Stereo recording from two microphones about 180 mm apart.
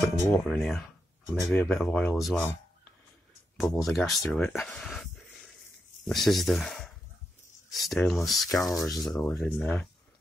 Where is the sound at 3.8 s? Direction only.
Centre (ahead or behind).